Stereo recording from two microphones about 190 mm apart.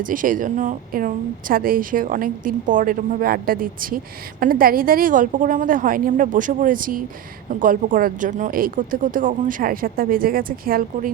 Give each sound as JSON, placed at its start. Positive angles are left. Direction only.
{"t": 0.0, "sound": "a woman's voice", "side_deg": -45}